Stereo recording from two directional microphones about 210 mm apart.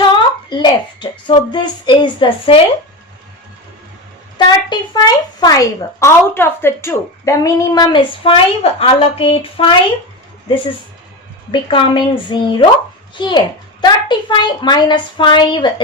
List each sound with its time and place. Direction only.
0.1 s a child's voice: 20° left (ahead or behind)
4.4 s a woman's voice: 20° left (ahead or behind)
11.5 s a woman's voice: 20° left (ahead or behind)